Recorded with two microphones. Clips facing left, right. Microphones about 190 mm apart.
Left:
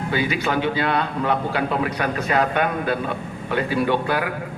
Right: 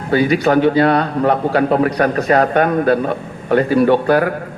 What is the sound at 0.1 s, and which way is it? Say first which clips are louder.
A man's voice: right 10 dB; 40° right (ahead or behind).